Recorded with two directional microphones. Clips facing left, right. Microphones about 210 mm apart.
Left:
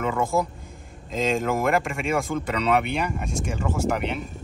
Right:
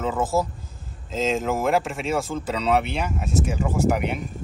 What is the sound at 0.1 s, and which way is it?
Speech, 5° right (ahead or behind).